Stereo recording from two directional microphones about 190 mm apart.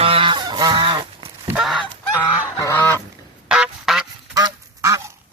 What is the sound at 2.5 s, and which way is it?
Goose, 10° left (ahead or behind).